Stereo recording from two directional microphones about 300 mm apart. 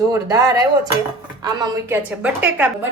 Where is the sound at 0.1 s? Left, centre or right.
Centre.